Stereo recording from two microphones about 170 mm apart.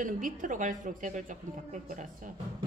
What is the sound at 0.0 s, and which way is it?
A woman's voice, 50° right (ahead or behind).